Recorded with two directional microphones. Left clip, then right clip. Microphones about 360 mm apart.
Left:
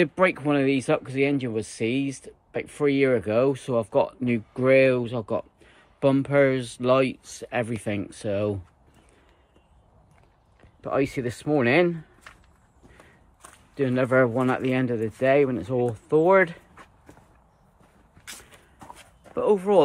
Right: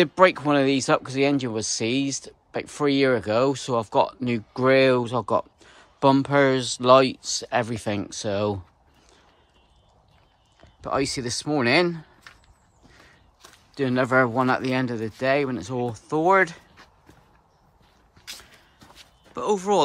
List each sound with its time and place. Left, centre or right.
0.0 s speech: centre
10.8 s speech: centre
13.4 s speech: centre
18.9 s a sound: centre